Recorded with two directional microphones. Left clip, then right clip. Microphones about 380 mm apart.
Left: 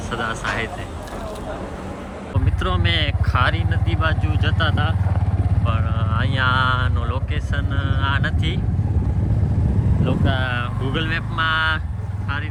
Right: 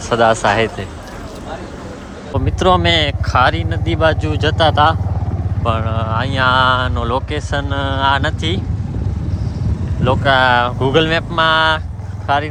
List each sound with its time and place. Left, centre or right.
0.1 s speech: centre
2.4 s speech: centre
10.0 s speech: centre